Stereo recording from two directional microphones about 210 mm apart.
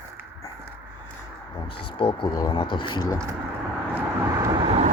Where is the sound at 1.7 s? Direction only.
25° left (ahead or behind).